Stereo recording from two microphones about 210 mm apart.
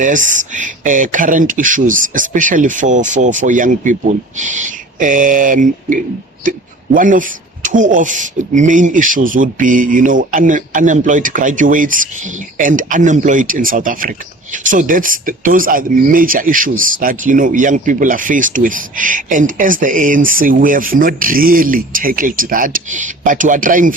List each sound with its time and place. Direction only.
0.0 s speech: 35° right (ahead or behind)